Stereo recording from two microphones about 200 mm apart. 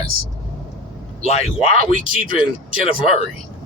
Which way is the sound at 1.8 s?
45° right (ahead or behind).